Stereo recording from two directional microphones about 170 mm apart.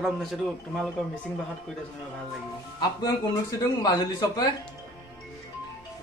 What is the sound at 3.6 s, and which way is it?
Speech, 20° left (ahead or behind).